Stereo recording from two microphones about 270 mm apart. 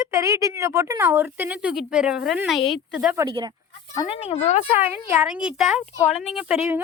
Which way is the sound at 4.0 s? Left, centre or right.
Left.